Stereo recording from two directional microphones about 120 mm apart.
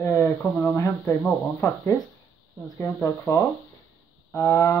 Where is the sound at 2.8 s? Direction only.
20° left (ahead or behind).